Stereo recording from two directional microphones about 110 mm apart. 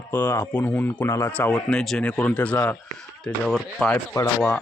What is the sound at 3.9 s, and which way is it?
Speech, 25° left (ahead or behind).